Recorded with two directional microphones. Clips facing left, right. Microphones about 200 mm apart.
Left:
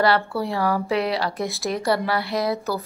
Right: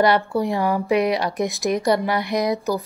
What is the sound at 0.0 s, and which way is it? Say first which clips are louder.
A woman's voice: right 3 dB; 20° right (ahead or behind).